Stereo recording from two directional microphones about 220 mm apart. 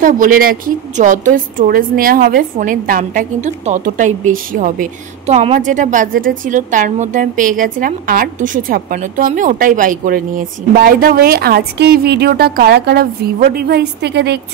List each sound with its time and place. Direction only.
0.0 s a woman's voice: 40° right (ahead or behind)